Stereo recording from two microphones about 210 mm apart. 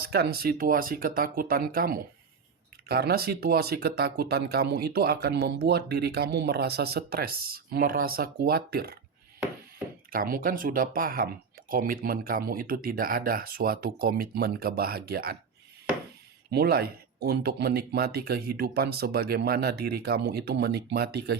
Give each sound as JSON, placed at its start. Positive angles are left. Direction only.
{"t": 0.0, "sound": "speech", "side_deg": -50}
{"t": 16.5, "sound": "speech", "side_deg": -50}